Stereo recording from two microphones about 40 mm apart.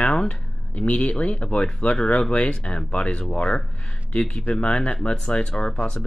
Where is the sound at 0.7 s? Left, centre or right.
Left.